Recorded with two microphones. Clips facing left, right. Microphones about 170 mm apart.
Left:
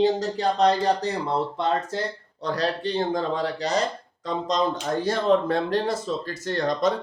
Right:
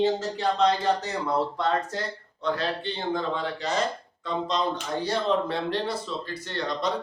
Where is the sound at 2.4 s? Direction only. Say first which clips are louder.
Left 2 dB; 40° left (ahead or behind).